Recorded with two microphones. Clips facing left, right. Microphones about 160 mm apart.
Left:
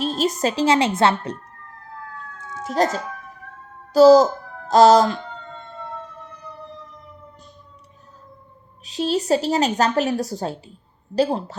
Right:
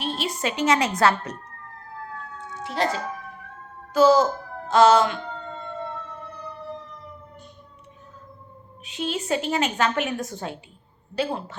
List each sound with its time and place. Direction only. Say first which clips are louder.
0.0 s a woman's voice: left 6 dB; 40° left (ahead or behind)
2.6 s a woman's voice: left 4 dB; 45° left (ahead or behind)
8.8 s a woman's voice: left 6 dB; 35° left (ahead or behind)